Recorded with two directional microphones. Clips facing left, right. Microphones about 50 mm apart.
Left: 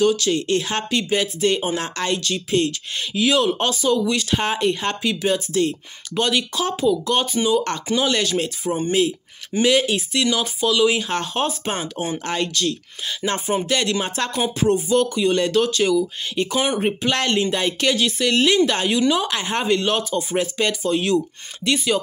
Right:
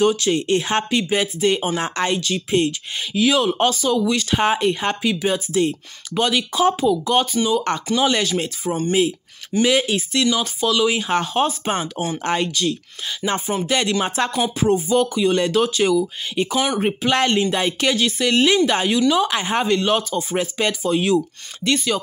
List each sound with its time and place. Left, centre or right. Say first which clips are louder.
0.0 s speech: right 1 dB; right
0.8 s speech: right 1 dB; centre
1.8 s speech: right 2 dB; centre
3.2 s speech: right 1 dB; centre
19.2 s speech: right 2 dB; centre
21.6 s speech: even; centre